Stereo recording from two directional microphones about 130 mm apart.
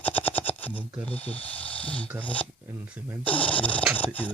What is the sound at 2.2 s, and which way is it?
Speech, 10° left (ahead or behind).